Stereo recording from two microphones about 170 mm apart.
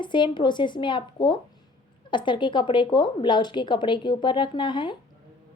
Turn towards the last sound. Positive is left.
turn(degrees=30)  # may be behind; listen again after turning